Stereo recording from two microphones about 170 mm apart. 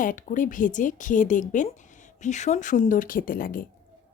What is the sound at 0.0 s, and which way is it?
Speech, 50° left (ahead or behind).